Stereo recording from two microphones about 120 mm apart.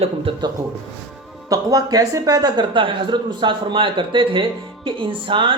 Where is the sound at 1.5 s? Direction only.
30° right (ahead or behind).